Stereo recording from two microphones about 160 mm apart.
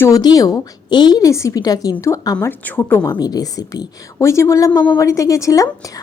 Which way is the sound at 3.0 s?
25° left (ahead or behind).